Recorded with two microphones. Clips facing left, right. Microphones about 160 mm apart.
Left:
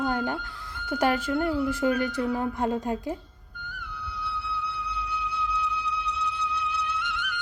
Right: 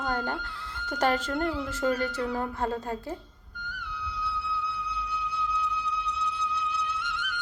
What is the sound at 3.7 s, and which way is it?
Music, 50° left (ahead or behind).